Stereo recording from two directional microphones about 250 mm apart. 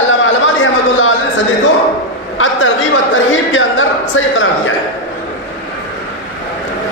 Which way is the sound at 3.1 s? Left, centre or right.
Left.